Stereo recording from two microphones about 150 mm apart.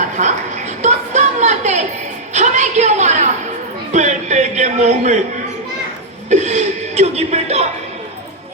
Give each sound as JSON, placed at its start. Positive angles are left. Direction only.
{"t": 0.2, "sound": "a woman's voice", "side_deg": -50}
{"t": 3.9, "sound": "a sound", "side_deg": -50}
{"t": 6.3, "sound": "speech", "side_deg": -50}